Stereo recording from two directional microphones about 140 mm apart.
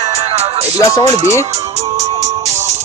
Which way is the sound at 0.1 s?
45° right (ahead or behind).